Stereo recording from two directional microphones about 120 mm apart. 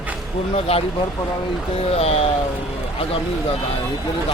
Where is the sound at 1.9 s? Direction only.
60° left (ahead or behind).